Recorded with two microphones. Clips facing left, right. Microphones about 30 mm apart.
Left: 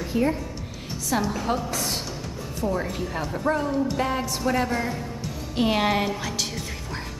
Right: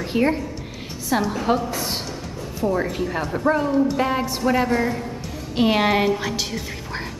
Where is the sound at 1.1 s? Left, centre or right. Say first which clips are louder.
Right 4 dB; centre.